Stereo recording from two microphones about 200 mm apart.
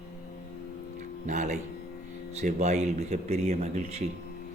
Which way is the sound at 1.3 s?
35° right (ahead or behind).